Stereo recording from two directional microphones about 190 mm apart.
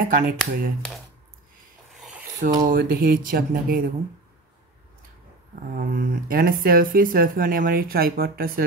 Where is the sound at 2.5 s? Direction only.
50° right (ahead or behind).